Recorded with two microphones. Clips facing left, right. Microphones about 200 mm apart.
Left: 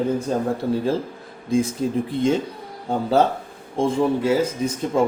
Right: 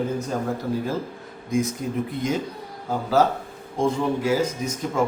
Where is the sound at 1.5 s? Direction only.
30° left (ahead or behind).